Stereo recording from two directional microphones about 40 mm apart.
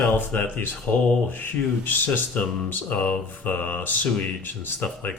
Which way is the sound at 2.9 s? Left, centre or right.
Left.